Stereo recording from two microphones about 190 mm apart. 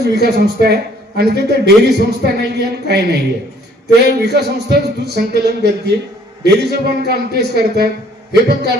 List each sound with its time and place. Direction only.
0.0 s a man's voice: 60° right (ahead or behind)
4.2 s a man's voice: 60° right (ahead or behind)